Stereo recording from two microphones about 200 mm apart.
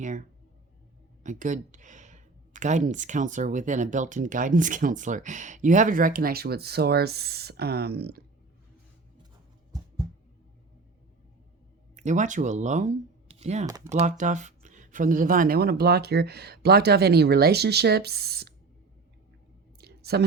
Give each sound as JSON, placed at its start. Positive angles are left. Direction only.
{"t": 0.0, "sound": "speech", "side_deg": -40}
{"t": 11.9, "sound": "speech", "side_deg": -35}
{"t": 13.7, "sound": "speech", "side_deg": -15}
{"t": 14.0, "sound": "speech", "side_deg": -40}
{"t": 19.8, "sound": "a sound", "side_deg": -50}